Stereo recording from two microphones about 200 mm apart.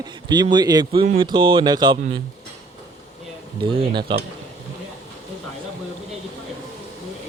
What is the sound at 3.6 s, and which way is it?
Speech, 25° right (ahead or behind).